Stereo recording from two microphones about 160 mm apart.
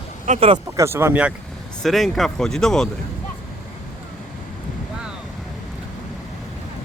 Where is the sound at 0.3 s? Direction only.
35° right (ahead or behind).